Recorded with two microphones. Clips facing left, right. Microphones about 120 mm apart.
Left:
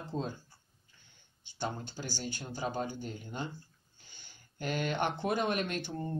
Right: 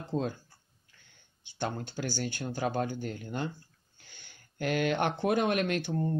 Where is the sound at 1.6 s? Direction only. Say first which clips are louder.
Right 4 dB; 60° right (ahead or behind).